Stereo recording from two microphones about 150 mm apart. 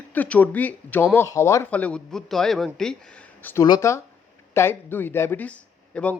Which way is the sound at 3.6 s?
25° left (ahead or behind).